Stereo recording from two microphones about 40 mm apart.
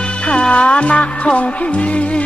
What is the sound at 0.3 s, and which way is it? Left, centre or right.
Music, left.